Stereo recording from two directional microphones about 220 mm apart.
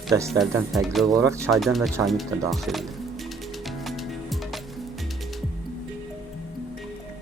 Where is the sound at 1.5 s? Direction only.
Centre (ahead or behind).